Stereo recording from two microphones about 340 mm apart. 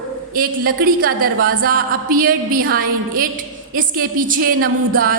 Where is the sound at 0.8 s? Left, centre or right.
Right.